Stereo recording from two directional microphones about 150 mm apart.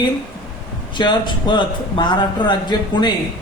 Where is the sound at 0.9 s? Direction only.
30° left (ahead or behind).